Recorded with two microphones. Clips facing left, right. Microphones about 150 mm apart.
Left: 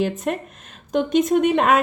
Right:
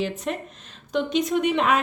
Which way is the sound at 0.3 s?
50° left (ahead or behind).